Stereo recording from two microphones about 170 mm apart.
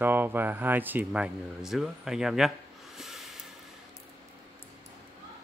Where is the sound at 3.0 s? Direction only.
Centre (ahead or behind).